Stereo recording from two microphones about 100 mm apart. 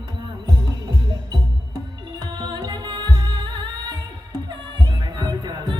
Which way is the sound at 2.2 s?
45° right (ahead or behind).